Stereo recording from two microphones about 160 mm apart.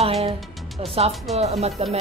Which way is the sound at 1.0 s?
35° right (ahead or behind).